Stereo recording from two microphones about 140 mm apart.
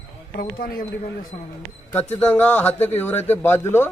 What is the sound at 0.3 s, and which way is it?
Speech, 90° left.